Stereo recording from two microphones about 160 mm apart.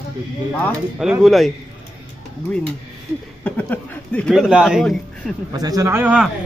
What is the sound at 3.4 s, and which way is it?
Speech, 10° left (ahead or behind).